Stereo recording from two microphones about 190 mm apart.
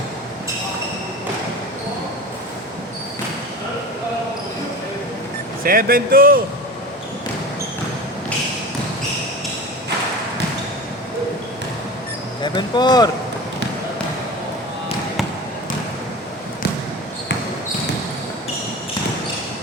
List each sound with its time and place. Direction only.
5.6 s speech: 50° right (ahead or behind)
12.4 s insect: 25° left (ahead or behind)